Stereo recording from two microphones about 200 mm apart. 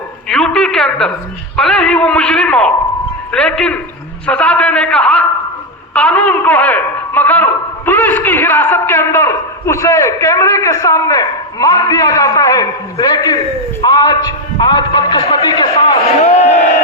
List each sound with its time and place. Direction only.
0.3 s a woman's voice: 5° left (ahead or behind); by 16.5 s 25° left (ahead or behind)